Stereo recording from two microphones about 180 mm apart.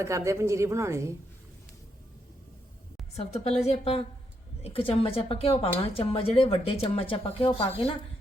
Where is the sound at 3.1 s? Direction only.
35° left (ahead or behind).